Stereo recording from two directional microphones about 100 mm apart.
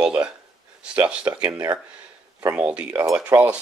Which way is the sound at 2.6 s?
10° right (ahead or behind).